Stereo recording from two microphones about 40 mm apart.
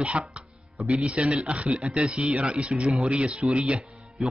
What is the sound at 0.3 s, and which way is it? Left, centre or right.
Music, right.